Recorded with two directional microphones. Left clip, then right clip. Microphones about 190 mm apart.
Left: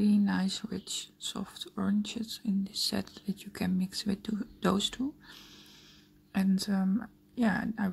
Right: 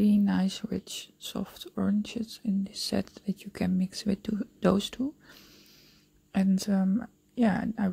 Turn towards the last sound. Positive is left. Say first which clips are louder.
# right 3 dB
turn(degrees=-30)  # may be behind; listen again after turning